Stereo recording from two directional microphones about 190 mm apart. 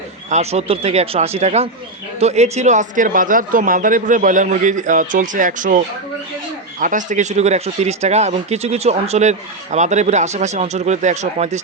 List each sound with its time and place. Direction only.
0.3 s a man's voice: 35° right (ahead or behind)